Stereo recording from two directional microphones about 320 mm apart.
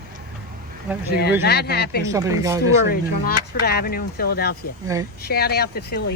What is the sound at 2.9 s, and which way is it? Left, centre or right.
Speech, left.